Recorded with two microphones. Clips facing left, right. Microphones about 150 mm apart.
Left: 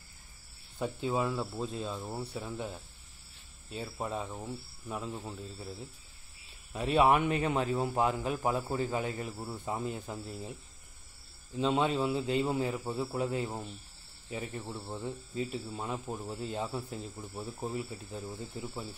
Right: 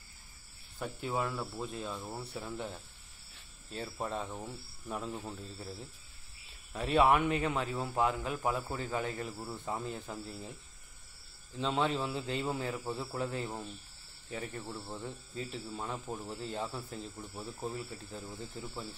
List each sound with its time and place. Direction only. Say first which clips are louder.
0.7 s speech: left 4 dB; 15° left (ahead or behind)
2.0 s speech: left 3 dB; 10° left (ahead or behind)
3.7 s speech: left 1 dB; centre (ahead or behind)
5.5 s speech: left 1 dB; centre (ahead or behind)
6.7 s speech: left 1 dB; 15° left (ahead or behind)